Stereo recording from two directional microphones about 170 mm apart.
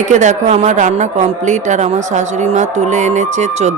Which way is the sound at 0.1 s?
45° right (ahead or behind).